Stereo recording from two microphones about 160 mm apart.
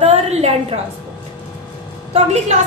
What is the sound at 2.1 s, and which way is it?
Speech, 45° right (ahead or behind).